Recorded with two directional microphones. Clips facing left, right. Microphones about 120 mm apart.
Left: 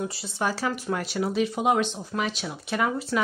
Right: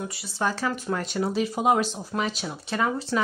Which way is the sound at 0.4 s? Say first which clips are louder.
Even; 10° left (ahead or behind).